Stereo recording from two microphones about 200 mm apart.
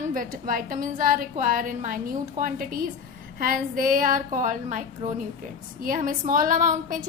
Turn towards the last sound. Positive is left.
turn(degrees=-40)  # may be behind; listen again after turning